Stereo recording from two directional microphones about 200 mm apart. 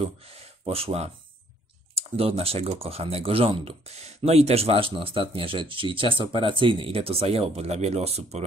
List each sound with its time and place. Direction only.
0.0 s speech: 30° right (ahead or behind)